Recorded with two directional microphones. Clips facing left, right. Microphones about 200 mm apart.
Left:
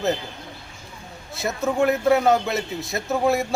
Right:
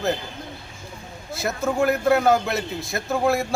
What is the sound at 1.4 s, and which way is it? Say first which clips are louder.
Speech: left 1 dB; centre (ahead or behind).